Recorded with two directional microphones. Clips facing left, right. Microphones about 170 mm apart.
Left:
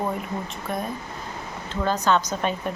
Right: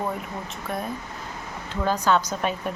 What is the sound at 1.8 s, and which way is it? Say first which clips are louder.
Speech: even; 10° right (ahead or behind).